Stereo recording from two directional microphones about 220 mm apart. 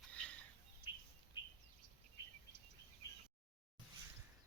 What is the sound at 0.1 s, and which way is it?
Bird, 5° left (ahead or behind).